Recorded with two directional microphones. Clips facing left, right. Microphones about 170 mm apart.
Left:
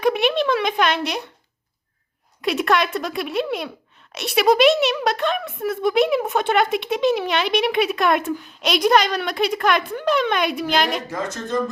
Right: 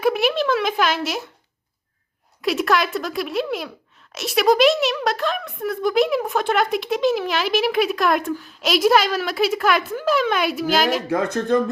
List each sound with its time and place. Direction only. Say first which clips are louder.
0.0 s a sound: even; centre (ahead or behind)
2.4 s speech: even; centre (ahead or behind)
11.1 s speech: right 6 dB; 60° right (ahead or behind)